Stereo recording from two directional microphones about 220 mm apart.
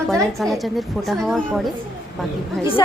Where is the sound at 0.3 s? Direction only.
Centre (ahead or behind).